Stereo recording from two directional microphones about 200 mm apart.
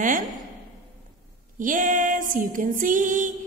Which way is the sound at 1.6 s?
40° right (ahead or behind).